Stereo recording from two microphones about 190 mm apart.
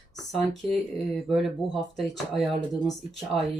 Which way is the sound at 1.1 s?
Centre (ahead or behind).